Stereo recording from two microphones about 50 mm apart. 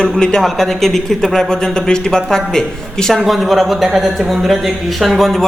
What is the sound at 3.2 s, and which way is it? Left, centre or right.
Speech, centre.